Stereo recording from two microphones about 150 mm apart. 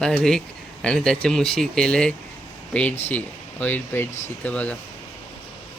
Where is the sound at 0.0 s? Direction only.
5° left (ahead or behind).